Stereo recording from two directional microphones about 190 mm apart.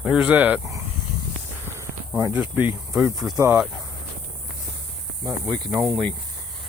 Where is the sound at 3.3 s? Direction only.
15° right (ahead or behind).